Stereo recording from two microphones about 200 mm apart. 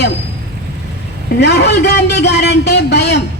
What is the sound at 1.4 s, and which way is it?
A man's voice, 55° left (ahead or behind).